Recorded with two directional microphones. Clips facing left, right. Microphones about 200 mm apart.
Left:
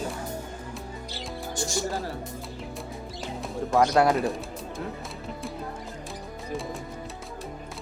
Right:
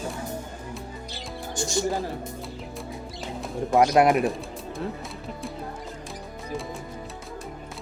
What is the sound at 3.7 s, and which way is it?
Speech, 20° right (ahead or behind).